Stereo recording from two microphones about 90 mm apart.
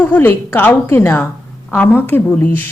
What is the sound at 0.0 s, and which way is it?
Speech, 20° left (ahead or behind).